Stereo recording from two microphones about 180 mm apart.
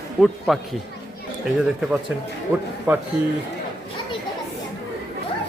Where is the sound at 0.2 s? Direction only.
Centre (ahead or behind).